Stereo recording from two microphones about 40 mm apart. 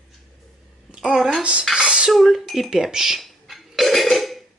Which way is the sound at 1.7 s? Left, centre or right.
Right.